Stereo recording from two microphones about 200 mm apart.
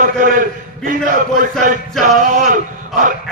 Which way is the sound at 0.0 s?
40° right (ahead or behind).